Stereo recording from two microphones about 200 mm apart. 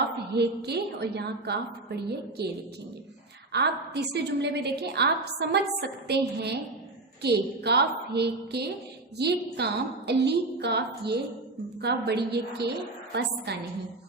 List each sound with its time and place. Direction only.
0.3 s a woman's voice: 55° right (ahead or behind)